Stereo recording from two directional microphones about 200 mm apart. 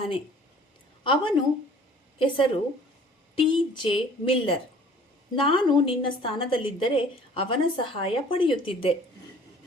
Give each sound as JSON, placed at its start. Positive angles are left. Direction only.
{"t": 1.0, "sound": "a woman's voice", "side_deg": 25}